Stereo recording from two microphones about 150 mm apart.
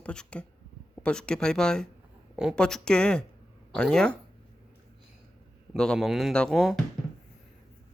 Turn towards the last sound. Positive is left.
turn(degrees=0)  # may be behind; listen again after turning